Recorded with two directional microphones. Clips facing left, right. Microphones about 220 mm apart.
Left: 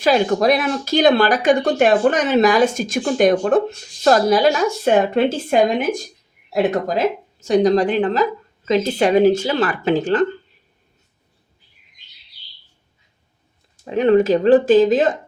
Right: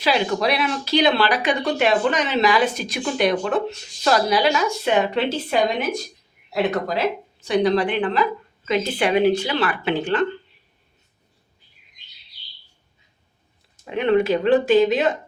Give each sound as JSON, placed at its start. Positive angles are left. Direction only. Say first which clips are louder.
{"t": 0.0, "sound": "speech", "louder": "left 5 dB", "side_deg": 45}
{"t": 13.8, "sound": "speech", "louder": "left 4 dB", "side_deg": 40}